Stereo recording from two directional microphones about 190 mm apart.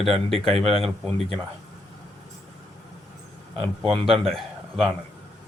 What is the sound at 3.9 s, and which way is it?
Speech, 30° right (ahead or behind).